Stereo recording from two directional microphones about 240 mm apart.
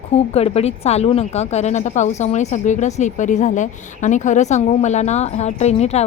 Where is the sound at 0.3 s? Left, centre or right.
Left.